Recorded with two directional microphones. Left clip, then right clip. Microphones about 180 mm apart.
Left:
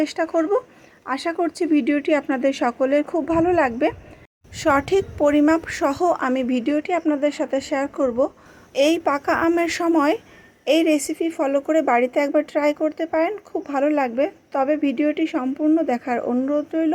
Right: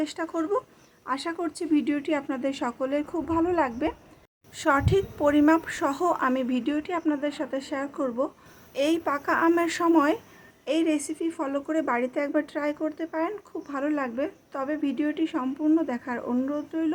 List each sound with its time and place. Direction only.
0.0 s a woman's voice: 15° left (ahead or behind)